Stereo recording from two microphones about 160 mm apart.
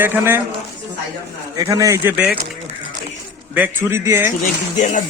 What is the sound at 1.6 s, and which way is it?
Speech, 20° right (ahead or behind).